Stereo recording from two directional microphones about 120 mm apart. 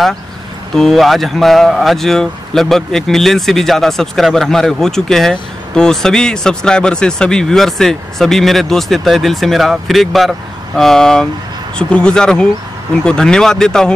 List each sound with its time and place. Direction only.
0.7 s speech: centre (ahead or behind)